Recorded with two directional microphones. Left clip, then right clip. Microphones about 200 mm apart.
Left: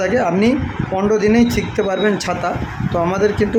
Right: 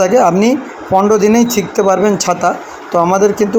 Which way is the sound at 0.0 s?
20° right (ahead or behind).